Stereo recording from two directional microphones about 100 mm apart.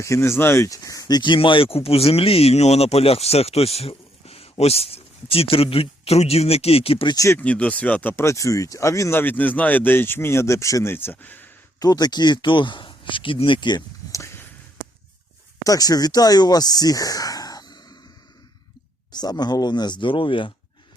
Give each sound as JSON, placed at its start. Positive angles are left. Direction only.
{"t": 0.0, "sound": "speech", "side_deg": 30}
{"t": 7.1, "sound": "speech", "side_deg": 35}
{"t": 7.3, "sound": "speech", "side_deg": 15}
{"t": 10.9, "sound": "speech", "side_deg": 20}
{"t": 11.8, "sound": "speech", "side_deg": 40}
{"t": 14.1, "sound": "a sound", "side_deg": 30}
{"t": 15.6, "sound": "speech", "side_deg": 40}
{"t": 19.1, "sound": "speech", "side_deg": 45}